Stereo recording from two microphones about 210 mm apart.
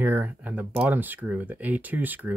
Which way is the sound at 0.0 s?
10° right (ahead or behind).